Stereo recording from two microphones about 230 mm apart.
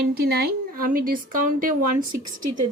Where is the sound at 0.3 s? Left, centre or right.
Right.